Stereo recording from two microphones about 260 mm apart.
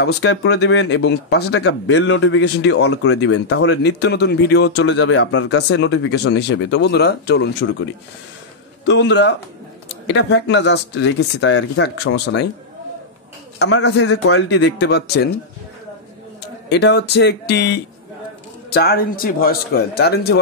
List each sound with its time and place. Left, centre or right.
0.0 s a man's voice: left
13.6 s a man's voice: left
16.6 s speech: left